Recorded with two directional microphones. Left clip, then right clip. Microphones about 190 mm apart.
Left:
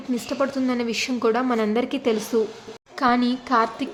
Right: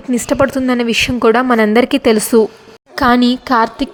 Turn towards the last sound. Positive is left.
turn(degrees=-45)  # may be behind; listen again after turning